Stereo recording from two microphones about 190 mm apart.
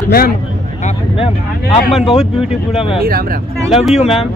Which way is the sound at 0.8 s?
35° left (ahead or behind).